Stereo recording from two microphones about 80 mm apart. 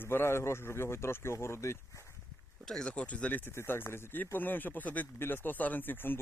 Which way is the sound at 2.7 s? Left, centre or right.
Centre.